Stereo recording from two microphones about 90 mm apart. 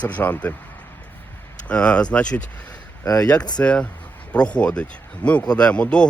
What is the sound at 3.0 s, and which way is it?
Speech, 40° left (ahead or behind).